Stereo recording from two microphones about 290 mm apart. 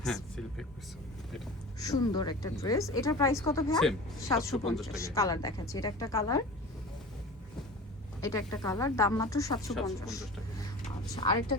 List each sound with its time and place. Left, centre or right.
0.0 s a sound: centre
1.8 s a woman's voice: centre
8.2 s a woman's voice: centre
10.8 s music: centre